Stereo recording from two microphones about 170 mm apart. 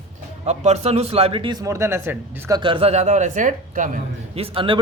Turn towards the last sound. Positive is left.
turn(degrees=-30)  # may be behind; listen again after turning